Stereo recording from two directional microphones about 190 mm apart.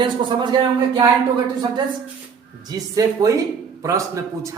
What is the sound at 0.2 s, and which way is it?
Speech, 25° right (ahead or behind).